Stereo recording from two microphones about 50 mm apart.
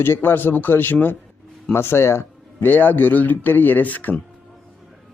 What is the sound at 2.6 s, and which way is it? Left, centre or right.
Speech, left.